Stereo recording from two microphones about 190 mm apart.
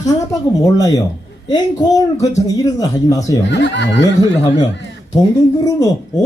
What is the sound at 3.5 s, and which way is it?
Speech, 70° left (ahead or behind).